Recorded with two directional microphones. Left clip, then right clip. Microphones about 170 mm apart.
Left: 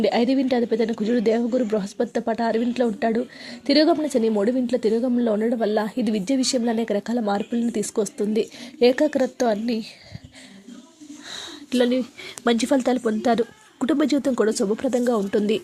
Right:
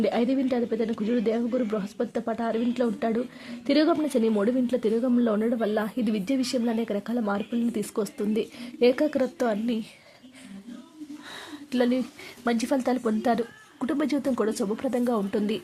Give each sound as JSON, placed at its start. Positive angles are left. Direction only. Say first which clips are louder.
{"t": 0.0, "sound": "a woman's voice", "louder": "left 5 dB", "side_deg": 10}
{"t": 11.3, "sound": "a sound", "louder": "left 7 dB", "side_deg": 15}
{"t": 12.5, "sound": "speech", "louder": "left 5 dB", "side_deg": 25}